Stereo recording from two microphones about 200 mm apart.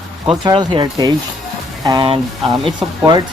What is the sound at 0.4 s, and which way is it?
Speech, 20° right (ahead or behind).